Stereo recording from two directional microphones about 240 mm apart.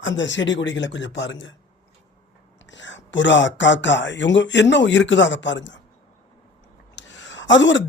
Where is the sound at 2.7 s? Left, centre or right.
Left.